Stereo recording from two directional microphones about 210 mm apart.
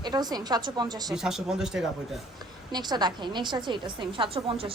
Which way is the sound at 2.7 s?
20° right (ahead or behind).